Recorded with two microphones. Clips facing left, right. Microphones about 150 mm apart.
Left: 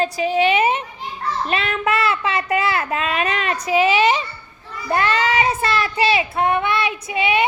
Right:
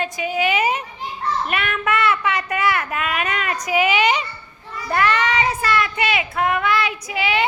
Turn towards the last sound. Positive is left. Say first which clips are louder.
# left 2 dB
turn(degrees=25)  # may be behind; listen again after turning